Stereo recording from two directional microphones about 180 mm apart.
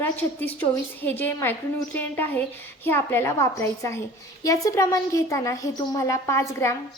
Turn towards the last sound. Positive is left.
turn(degrees=15)  # may be behind; listen again after turning